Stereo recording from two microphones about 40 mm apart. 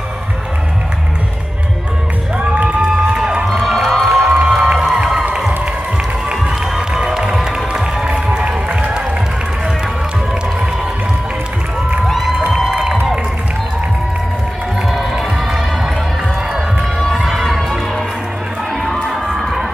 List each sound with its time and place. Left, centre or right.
2.5 s crowd: right
3.6 s music: centre
4.3 s music: centre
6.7 s music: centre
8.4 s run: right
12.1 s music: centre
14.9 s music: centre
17.2 s crowd: centre
17.5 s crowd: centre
19.2 s crowd: centre